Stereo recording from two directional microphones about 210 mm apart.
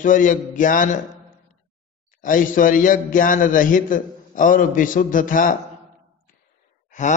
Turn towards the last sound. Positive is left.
turn(degrees=35)  # may be behind; listen again after turning